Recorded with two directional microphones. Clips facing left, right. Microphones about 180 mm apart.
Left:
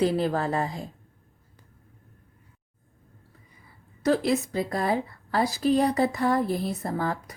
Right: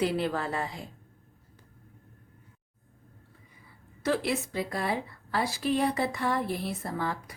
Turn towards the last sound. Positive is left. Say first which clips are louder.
# left 4 dB
turn(degrees=40)  # may be behind; listen again after turning